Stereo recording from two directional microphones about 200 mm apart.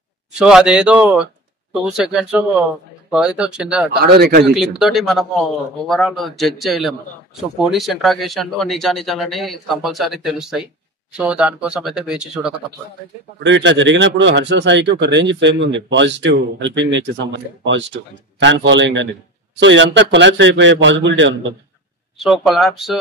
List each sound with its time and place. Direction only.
0.3 s speech: 5° right (ahead or behind)
4.0 s a man's voice: 50° right (ahead or behind)
4.6 s speech: centre (ahead or behind)
13.4 s speech: 65° right (ahead or behind)
22.2 s speech: centre (ahead or behind)